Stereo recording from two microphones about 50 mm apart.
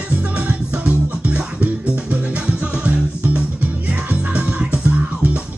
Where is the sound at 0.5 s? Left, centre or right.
Right.